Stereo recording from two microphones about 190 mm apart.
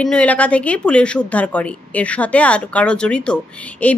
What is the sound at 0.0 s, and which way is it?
Speech, 5° left (ahead or behind).